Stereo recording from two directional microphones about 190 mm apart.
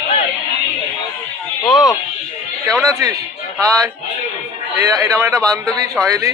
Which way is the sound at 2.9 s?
15° right (ahead or behind).